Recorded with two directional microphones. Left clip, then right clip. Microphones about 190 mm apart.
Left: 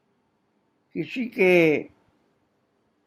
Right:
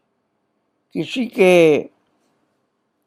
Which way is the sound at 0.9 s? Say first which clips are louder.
Right 7 dB; 40° right (ahead or behind).